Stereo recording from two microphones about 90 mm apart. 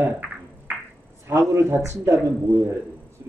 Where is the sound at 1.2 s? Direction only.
30° right (ahead or behind).